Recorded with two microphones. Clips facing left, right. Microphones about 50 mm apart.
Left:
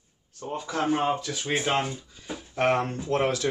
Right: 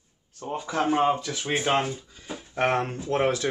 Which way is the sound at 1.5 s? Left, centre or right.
Centre.